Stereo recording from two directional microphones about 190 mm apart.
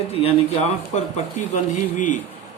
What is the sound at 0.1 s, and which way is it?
Speech, 30° left (ahead or behind).